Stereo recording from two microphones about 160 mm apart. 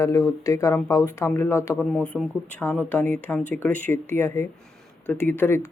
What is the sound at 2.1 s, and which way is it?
Speech, 5° left (ahead or behind).